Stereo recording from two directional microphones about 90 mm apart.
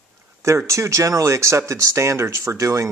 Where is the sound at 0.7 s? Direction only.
35° right (ahead or behind).